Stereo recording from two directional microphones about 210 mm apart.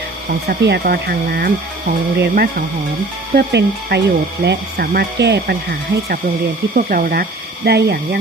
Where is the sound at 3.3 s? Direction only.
50° right (ahead or behind).